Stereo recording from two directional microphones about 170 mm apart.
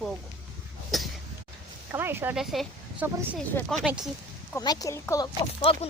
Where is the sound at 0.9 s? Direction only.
Centre (ahead or behind).